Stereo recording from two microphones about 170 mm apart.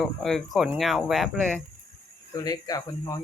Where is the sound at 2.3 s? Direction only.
20° left (ahead or behind).